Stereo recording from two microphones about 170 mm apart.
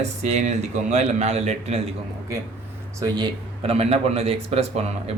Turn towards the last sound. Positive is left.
turn(degrees=-35)  # may be behind; listen again after turning